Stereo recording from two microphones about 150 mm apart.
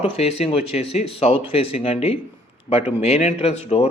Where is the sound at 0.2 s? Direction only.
45° left (ahead or behind).